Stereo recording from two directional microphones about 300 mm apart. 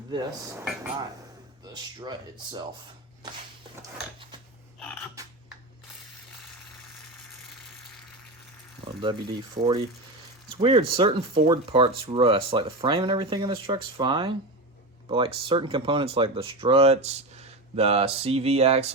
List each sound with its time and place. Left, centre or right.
0.1 s speech: centre
9.0 s speech: centre